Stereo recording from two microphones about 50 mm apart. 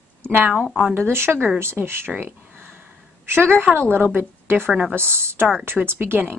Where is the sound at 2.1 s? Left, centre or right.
Right.